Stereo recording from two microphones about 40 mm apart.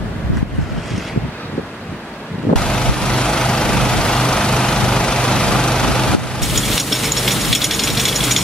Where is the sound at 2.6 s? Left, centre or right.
Centre.